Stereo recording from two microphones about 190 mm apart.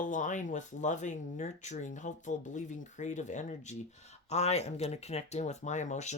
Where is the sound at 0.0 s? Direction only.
40° left (ahead or behind).